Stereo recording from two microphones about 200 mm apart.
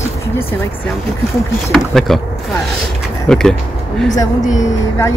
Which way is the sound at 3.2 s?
5° left (ahead or behind).